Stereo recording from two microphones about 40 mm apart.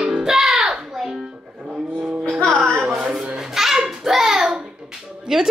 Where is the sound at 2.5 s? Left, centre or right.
Right.